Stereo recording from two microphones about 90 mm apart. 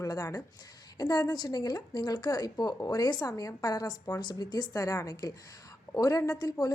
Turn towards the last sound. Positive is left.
turn(degrees=45)  # may be behind; listen again after turning